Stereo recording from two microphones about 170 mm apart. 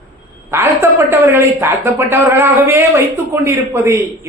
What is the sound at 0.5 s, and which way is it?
Speech, 15° right (ahead or behind).